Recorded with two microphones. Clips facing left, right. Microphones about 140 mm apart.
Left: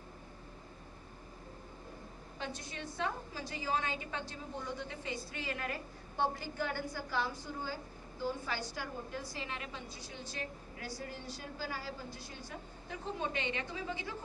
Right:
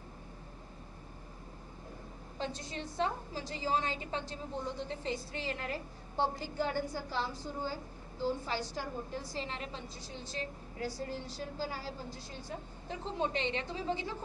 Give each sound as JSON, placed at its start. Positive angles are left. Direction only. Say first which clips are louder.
{"t": 2.3, "sound": "a woman's voice", "louder": "right 4 dB", "side_deg": -30}